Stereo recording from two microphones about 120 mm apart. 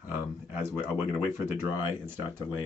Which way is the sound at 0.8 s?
15° right (ahead or behind).